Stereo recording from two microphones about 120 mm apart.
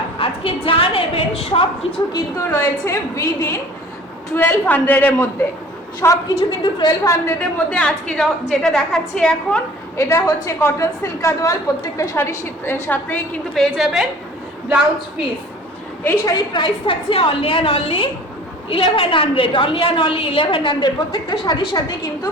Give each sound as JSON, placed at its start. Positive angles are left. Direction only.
{"t": 0.2, "sound": "a woman's voice", "side_deg": 50}
{"t": 2.1, "sound": "a woman's voice", "side_deg": 25}
{"t": 6.6, "sound": "a woman's voice", "side_deg": 35}
{"t": 7.7, "sound": "a woman's voice", "side_deg": 10}
{"t": 10.0, "sound": "a woman's voice", "side_deg": 25}
{"t": 16.0, "sound": "a woman's voice", "side_deg": 30}